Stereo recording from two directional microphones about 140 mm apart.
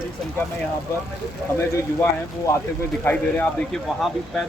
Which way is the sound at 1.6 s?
20° left (ahead or behind).